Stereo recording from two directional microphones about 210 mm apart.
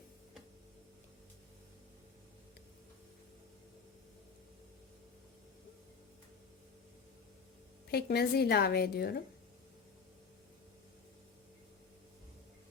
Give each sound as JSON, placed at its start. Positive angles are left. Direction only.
{"t": 7.9, "sound": "a woman's voice", "side_deg": 50}